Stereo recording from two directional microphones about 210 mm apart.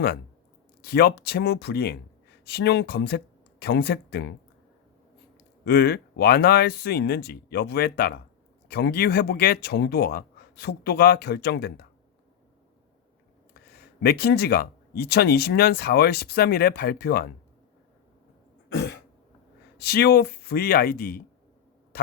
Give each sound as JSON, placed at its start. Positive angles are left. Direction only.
{"t": 0.8, "sound": "speech", "side_deg": 50}
{"t": 5.4, "sound": "speech", "side_deg": 50}
{"t": 13.5, "sound": "speech", "side_deg": 45}
{"t": 19.8, "sound": "speech", "side_deg": 50}